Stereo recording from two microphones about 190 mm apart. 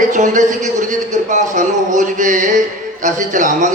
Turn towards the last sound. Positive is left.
turn(degrees=-40)  # may be behind; listen again after turning